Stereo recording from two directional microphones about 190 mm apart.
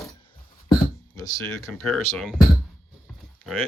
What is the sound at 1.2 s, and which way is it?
Speech, 20° left (ahead or behind).